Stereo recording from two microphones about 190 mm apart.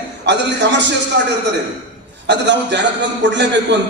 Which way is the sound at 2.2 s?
65° right (ahead or behind).